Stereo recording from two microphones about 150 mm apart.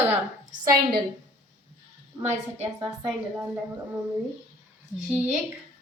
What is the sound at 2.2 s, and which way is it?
Speech, 50° right (ahead or behind).